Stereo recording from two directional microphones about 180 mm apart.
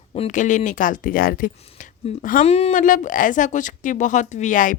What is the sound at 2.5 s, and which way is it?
Speech, 35° left (ahead or behind).